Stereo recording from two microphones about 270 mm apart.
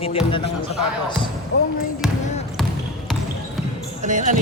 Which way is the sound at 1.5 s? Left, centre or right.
Left.